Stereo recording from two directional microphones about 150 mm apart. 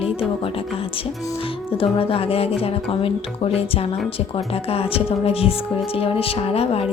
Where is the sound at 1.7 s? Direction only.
35° left (ahead or behind).